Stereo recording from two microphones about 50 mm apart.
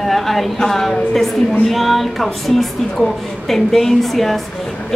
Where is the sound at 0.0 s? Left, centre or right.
Centre.